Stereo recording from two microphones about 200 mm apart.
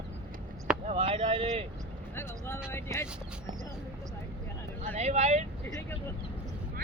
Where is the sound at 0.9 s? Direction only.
30° right (ahead or behind).